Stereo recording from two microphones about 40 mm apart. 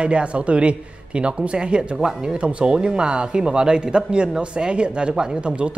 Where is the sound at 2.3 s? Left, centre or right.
Right.